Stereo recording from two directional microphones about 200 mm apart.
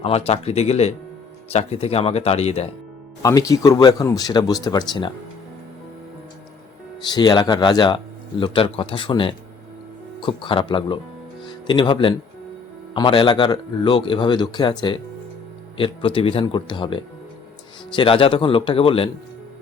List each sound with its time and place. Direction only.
0.0 s speech: 30° left (ahead or behind)
3.2 s speech: 15° left (ahead or behind)
7.0 s speech: 20° left (ahead or behind)